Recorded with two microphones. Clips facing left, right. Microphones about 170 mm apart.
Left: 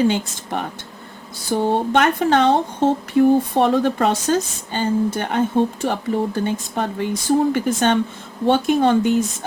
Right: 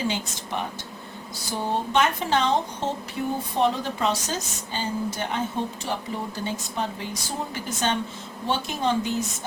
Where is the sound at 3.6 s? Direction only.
55° left (ahead or behind).